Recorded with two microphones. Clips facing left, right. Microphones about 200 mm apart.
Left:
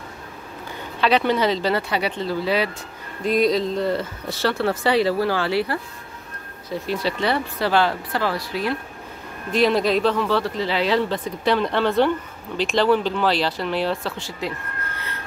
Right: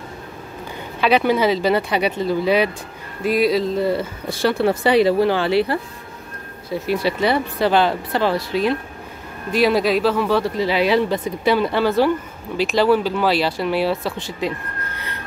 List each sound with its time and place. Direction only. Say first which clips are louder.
1.0 s speech: right 3 dB; 10° right (ahead or behind)
3.3 s speech: right 2 dB; 5° right (ahead or behind); by 5.8 s 25° right (ahead or behind)
6.9 s speech: right 4 dB; 10° right (ahead or behind)
9.5 s speech: right 2 dB; 5° right (ahead or behind)